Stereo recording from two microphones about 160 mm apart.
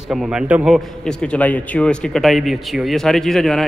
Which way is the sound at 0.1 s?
5° right (ahead or behind).